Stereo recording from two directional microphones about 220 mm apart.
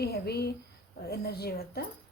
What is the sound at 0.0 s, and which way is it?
A woman's voice, 45° left (ahead or behind).